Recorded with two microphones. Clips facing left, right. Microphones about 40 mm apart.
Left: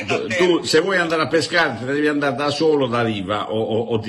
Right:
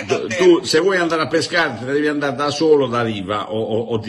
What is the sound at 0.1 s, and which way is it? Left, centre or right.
A man's voice, left.